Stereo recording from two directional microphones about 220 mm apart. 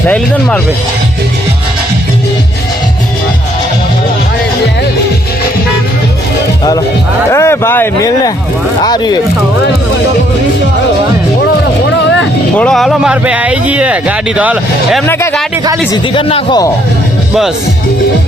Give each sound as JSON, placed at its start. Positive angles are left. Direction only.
{"t": 7.3, "sound": "speech", "side_deg": 10}
{"t": 12.5, "sound": "speech", "side_deg": 0}
{"t": 15.0, "sound": "speech", "side_deg": 10}
{"t": 15.9, "sound": "speech", "side_deg": 20}